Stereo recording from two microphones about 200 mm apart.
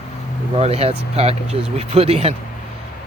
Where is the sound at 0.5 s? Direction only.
30° right (ahead or behind).